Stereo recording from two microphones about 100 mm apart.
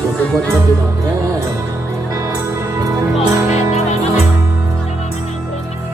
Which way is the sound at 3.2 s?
90° left.